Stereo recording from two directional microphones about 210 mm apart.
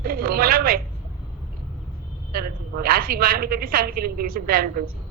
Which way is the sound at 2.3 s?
45° right (ahead or behind).